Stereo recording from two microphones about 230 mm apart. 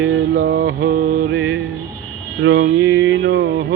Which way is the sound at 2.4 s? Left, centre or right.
Right.